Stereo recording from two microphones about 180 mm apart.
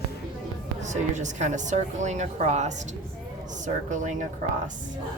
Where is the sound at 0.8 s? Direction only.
40° right (ahead or behind).